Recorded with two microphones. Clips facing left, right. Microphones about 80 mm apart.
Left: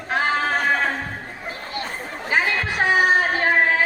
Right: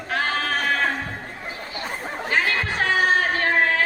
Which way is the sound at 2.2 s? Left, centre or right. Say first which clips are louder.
Left 1 dB; centre.